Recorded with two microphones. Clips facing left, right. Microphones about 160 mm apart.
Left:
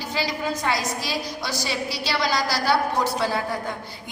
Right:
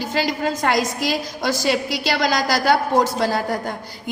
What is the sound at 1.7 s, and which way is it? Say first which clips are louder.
Speech: right 5 dB; 90° right.